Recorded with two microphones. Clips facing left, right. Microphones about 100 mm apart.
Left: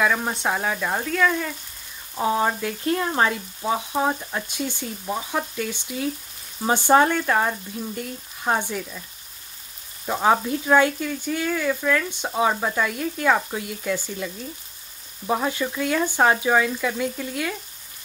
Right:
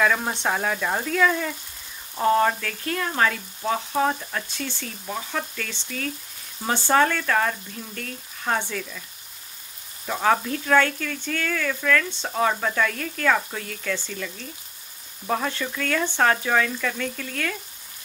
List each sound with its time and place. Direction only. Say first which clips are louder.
0.0 s speech: even; 5° left (ahead or behind)
10.0 s speech: left 2 dB; 20° left (ahead or behind)